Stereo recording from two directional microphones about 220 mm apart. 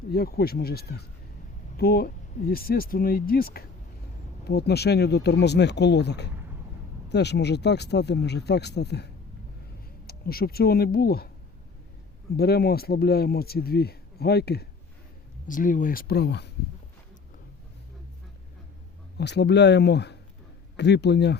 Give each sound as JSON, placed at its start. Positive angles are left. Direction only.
{"t": 0.1, "sound": "speech", "side_deg": 45}
{"t": 10.1, "sound": "speech", "side_deg": 45}
{"t": 12.4, "sound": "speech", "side_deg": 45}
{"t": 19.1, "sound": "speech", "side_deg": 50}